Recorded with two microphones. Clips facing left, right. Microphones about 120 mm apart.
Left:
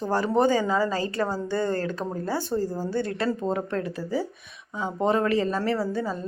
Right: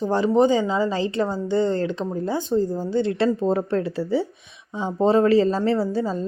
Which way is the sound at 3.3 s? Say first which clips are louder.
Right 5 dB; 30° right (ahead or behind).